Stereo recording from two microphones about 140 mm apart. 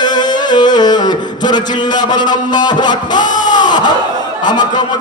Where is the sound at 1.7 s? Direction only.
30° left (ahead or behind).